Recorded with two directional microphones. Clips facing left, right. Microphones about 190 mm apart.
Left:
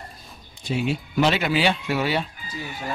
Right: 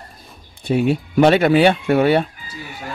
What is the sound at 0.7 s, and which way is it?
Speech, 55° right (ahead or behind).